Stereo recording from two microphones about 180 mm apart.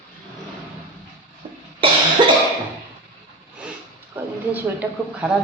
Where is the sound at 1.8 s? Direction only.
30° right (ahead or behind).